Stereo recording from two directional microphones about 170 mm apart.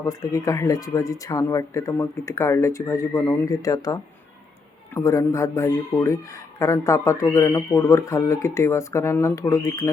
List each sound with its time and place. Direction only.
0.0 s speech: 20° left (ahead or behind)